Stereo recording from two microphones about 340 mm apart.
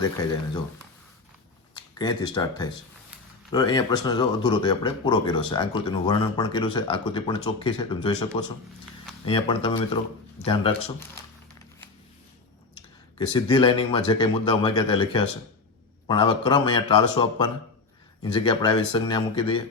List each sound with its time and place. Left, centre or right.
0.0 s speech: centre
2.0 s speech: centre
13.1 s speech: centre